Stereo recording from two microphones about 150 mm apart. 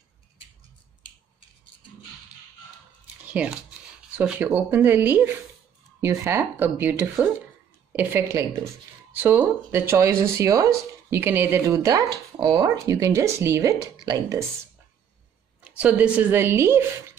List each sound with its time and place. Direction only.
3.4 s speech: 10° right (ahead or behind)
15.6 s speech: 10° right (ahead or behind)